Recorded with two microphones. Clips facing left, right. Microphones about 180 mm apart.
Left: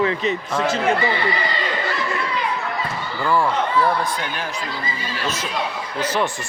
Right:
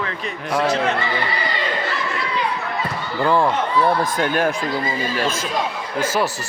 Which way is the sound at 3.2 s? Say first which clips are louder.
Right 2 dB; 20° right (ahead or behind).